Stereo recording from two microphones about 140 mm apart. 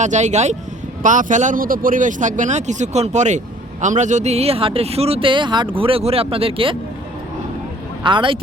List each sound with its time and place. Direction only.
0.0 s speech: 55° right (ahead or behind); by 6.7 s 40° right (ahead or behind)
8.0 s speech: 35° right (ahead or behind)